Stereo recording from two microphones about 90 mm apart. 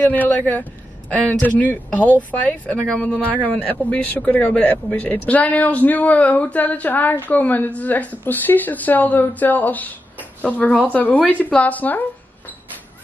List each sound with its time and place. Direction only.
0.0 s speech: 20° left (ahead or behind)